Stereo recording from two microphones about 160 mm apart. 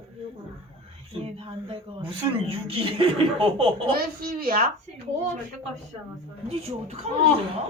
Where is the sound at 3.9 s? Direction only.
70° right (ahead or behind).